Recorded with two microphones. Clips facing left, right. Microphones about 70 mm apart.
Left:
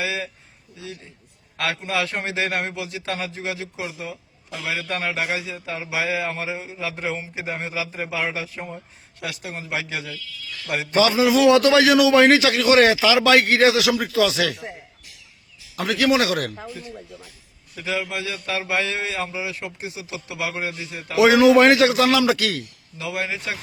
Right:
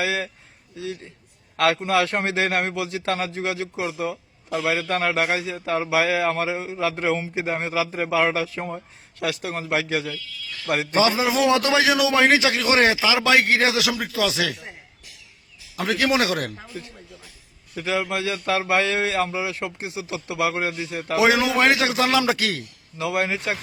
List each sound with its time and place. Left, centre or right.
0.0 s a sound: right
1.5 s a man's voice: right
2.9 s a man's voice: right
8.1 s speech: right
9.2 s speech: right
10.9 s a man's voice: right
15.7 s a man's voice: right
17.7 s a man's voice: right
21.2 s a man's voice: centre
22.2 s a man's voice: right
23.0 s a man's voice: right